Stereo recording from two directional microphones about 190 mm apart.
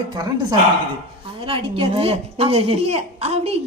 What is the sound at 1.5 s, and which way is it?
Speech, 30° right (ahead or behind).